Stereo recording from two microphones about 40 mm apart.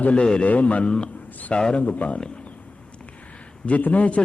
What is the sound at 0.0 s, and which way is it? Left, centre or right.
Speech, left.